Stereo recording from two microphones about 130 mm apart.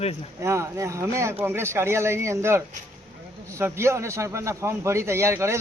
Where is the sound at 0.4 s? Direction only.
20° right (ahead or behind).